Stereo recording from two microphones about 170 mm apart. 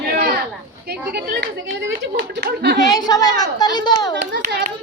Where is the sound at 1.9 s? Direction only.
90° right.